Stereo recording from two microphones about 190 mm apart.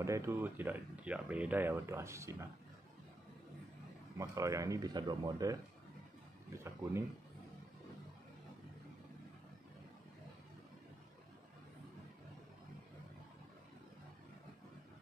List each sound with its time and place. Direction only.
0.0 s speech: 15° right (ahead or behind)
4.2 s speech: 15° right (ahead or behind)